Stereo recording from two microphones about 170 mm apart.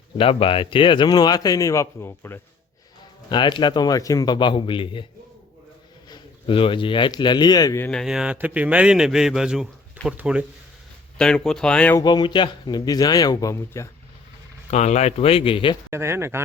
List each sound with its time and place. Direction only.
0.2 s speech: 30° left (ahead or behind); by 2.4 s 15° left (ahead or behind)
3.2 s speech: 25° left (ahead or behind)
6.1 s speech: 30° left (ahead or behind)
7.9 s a man's voice: centre (ahead or behind)
11.2 s a man's voice: 5° left (ahead or behind)
11.9 s speech: 25° left (ahead or behind)
14.7 s speech: 40° left (ahead or behind)
15.9 s speech: 15° right (ahead or behind)